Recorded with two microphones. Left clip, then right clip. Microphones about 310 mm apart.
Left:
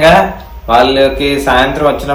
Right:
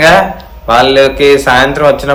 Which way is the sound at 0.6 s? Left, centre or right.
Right.